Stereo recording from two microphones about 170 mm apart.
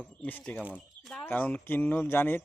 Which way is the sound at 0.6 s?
5° right (ahead or behind).